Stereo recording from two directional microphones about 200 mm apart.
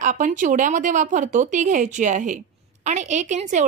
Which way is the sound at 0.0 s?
40° right (ahead or behind).